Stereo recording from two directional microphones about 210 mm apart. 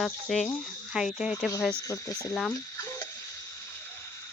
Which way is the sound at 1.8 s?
15° left (ahead or behind).